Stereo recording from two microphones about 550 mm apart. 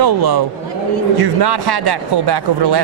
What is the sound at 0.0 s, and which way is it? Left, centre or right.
Speech, right.